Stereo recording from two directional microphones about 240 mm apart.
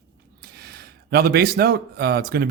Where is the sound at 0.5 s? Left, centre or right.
Right.